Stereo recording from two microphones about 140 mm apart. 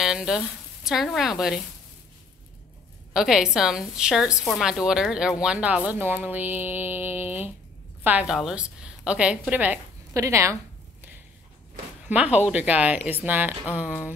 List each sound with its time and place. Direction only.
0.0 s a woman's voice: 5° right (ahead or behind)
3.1 s a woman's voice: 5° right (ahead or behind)
10.1 s a woman's voice: 20° right (ahead or behind)
12.1 s speech: 10° right (ahead or behind)